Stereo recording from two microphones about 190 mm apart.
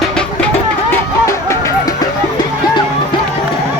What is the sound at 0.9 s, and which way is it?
Music, 15° left (ahead or behind).